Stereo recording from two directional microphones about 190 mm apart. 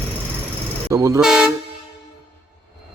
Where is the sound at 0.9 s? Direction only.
15° right (ahead or behind).